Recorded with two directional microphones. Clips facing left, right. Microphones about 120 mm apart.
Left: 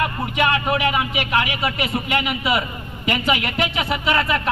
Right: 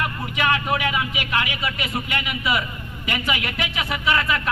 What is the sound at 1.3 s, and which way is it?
A man's voice, 25° left (ahead or behind).